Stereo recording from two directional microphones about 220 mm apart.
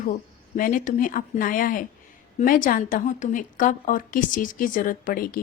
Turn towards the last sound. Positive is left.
turn(degrees=40)  # may be behind; listen again after turning